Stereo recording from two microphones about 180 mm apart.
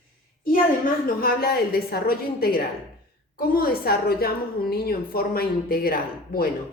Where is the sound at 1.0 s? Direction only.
55° left (ahead or behind).